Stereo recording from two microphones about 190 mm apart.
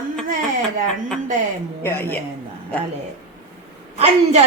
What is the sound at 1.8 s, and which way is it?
Speech, 10° left (ahead or behind).